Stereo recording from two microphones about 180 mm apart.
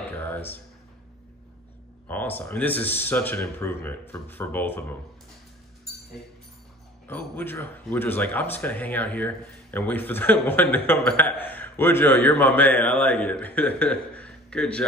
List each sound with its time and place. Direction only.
0.2 s a sound: 10° left (ahead or behind)
2.0 s speech: 10° left (ahead or behind)
7.1 s speech: 10° left (ahead or behind)